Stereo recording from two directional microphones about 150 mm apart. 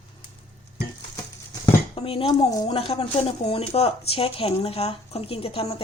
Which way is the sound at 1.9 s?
40° left (ahead or behind).